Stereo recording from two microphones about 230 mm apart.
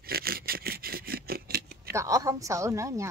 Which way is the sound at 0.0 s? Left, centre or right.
Right.